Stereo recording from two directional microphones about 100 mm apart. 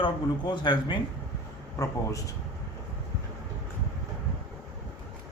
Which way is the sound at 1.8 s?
35° left (ahead or behind).